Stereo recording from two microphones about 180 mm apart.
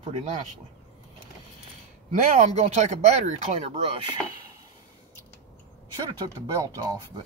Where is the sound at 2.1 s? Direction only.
45° right (ahead or behind).